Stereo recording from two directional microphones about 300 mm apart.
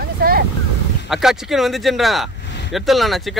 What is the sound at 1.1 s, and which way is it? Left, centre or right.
Speech, centre.